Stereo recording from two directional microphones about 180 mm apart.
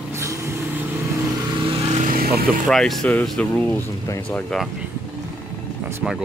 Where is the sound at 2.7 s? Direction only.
5° left (ahead or behind).